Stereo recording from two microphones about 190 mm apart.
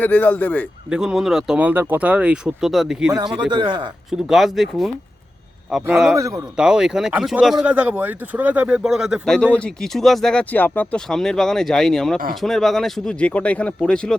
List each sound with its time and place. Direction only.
0.0 s speech: 10° left (ahead or behind)
0.9 s speech: 5° right (ahead or behind)
3.1 s speech: 20° right (ahead or behind)
4.3 s speech: centre (ahead or behind); by 6.4 s 15° right (ahead or behind)
6.6 s speech: 5° right (ahead or behind)